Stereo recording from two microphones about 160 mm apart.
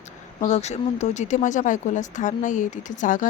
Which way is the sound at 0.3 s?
45° left (ahead or behind).